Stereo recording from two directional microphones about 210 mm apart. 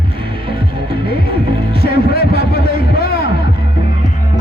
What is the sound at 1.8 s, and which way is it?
Music, 50° left (ahead or behind).